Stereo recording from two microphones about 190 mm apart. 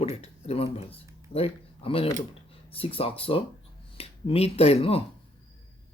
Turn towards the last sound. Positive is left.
turn(degrees=30)  # may be behind; listen again after turning